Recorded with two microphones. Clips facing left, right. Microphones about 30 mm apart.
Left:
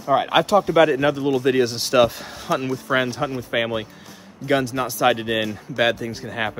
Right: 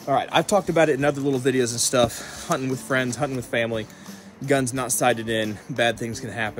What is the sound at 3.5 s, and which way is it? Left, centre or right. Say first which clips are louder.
Speech: left 2 dB; centre.